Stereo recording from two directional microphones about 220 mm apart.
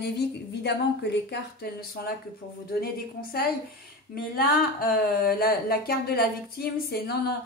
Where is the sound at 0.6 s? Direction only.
50° left (ahead or behind).